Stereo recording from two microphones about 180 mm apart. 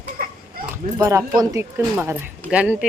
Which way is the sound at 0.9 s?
20° right (ahead or behind).